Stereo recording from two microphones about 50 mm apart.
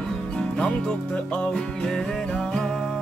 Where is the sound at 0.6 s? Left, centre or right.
Centre.